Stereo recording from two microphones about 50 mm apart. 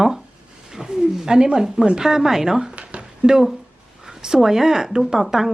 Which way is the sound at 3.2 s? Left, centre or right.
Centre.